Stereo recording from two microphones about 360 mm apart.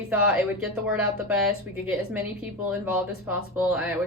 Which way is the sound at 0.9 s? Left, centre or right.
Centre.